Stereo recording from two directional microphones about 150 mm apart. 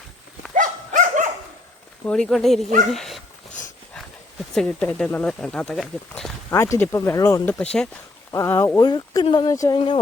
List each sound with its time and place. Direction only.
0.5 s livestock: 60° right (ahead or behind)
2.0 s speech: 5° left (ahead or behind)
4.5 s speech: 5° left (ahead or behind)
6.5 s speech: 20° left (ahead or behind)
7.4 s speech: 5° left (ahead or behind)
8.3 s speech: 20° left (ahead or behind)